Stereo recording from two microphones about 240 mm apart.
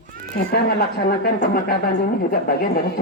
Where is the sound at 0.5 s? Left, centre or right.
Left.